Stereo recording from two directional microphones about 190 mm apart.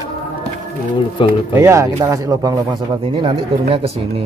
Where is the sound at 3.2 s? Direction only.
30° right (ahead or behind).